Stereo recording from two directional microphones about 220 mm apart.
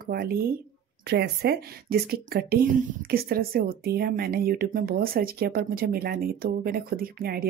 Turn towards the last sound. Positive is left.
turn(degrees=-40)  # may be behind; listen again after turning